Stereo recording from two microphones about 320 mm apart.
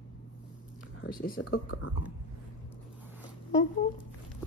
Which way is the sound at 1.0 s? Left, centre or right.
Left.